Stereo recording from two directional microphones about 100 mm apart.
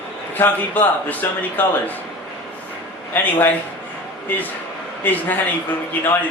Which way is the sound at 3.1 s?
20° left (ahead or behind).